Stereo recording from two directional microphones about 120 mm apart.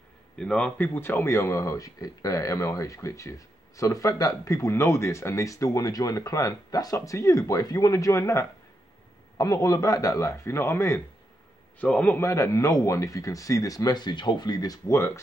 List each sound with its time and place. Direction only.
0.4 s a man's voice: 5° left (ahead or behind)
12.2 s speech: 25° left (ahead or behind)